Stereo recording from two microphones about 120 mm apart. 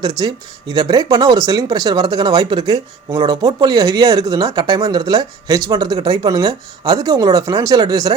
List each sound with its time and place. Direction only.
0.0 s speech: 35° right (ahead or behind)